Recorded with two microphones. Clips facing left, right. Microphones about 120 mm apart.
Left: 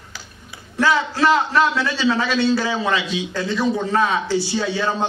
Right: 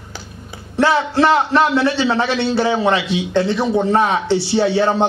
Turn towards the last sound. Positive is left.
turn(degrees=-30)  # may be behind; listen again after turning